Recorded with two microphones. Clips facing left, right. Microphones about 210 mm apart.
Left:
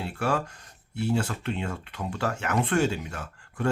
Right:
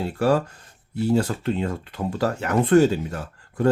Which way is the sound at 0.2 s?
35° right (ahead or behind).